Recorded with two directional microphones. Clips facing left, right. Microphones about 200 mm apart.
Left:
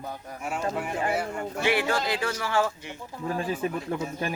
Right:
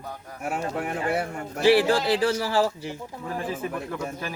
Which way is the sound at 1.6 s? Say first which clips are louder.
Right 7 dB; 35° right (ahead or behind).